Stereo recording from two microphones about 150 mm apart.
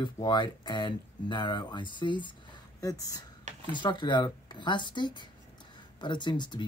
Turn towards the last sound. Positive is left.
turn(degrees=30)  # may be behind; listen again after turning